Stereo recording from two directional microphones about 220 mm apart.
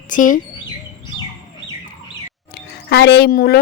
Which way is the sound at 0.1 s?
35° left (ahead or behind).